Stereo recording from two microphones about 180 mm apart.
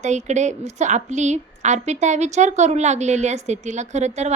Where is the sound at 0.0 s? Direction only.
40° right (ahead or behind).